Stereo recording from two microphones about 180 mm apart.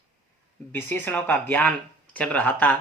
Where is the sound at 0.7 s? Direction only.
10° left (ahead or behind).